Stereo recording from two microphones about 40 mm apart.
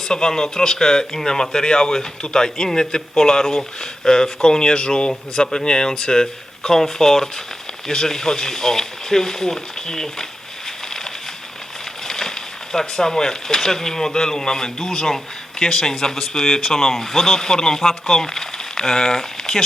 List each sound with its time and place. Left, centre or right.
0.1 s speech: centre
12.0 s speech: centre